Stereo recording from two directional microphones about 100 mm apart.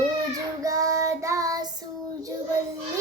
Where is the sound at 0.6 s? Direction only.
35° right (ahead or behind).